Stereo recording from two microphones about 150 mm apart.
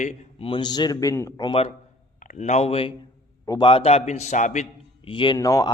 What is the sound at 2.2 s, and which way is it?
Speech, 55° left (ahead or behind).